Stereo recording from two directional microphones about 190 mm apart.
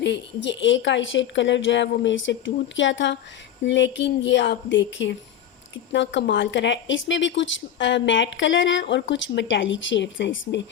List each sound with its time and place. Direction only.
0.0 s a woman's voice: 65° left (ahead or behind)